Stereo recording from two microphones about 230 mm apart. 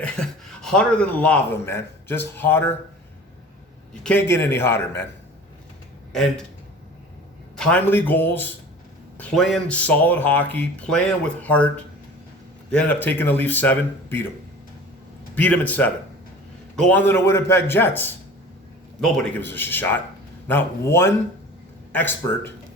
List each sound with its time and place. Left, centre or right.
0.0 s speech: centre
4.0 s speech: centre
6.1 s a man's voice: centre
7.5 s a man's voice: centre
12.7 s speech: centre
15.4 s a man's voice: centre